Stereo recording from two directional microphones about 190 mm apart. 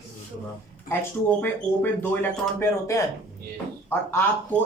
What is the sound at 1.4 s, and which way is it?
Speech, 10° left (ahead or behind).